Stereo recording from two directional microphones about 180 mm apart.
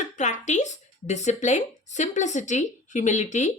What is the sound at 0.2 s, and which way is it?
A woman's voice, 40° left (ahead or behind).